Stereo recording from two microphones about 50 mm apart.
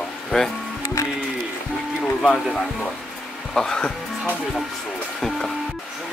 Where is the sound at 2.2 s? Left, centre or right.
Centre.